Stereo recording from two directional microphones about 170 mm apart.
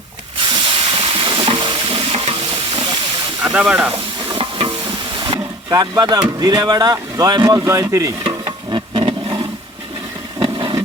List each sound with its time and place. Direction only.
0.3 s frying: 30° right (ahead or behind)
3.4 s speech: 5° right (ahead or behind)
3.9 s stir: 30° right (ahead or behind)
10.4 s vehicle: 30° right (ahead or behind)